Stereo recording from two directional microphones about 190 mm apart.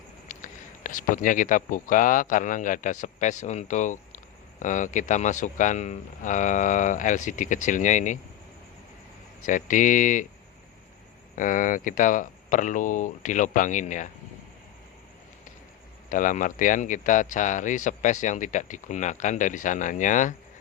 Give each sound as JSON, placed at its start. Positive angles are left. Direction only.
{"t": 0.3, "sound": "speech", "side_deg": 45}
{"t": 9.5, "sound": "speech", "side_deg": 45}
{"t": 11.3, "sound": "speech", "side_deg": 45}
{"t": 16.0, "sound": "speech", "side_deg": 45}